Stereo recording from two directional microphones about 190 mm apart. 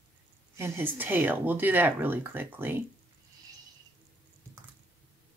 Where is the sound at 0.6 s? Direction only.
10° right (ahead or behind).